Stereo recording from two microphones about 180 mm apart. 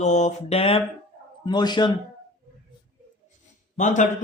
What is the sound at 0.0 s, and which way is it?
A man's voice, 40° left (ahead or behind).